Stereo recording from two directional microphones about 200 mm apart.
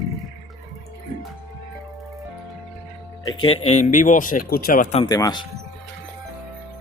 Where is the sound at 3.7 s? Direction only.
35° left (ahead or behind).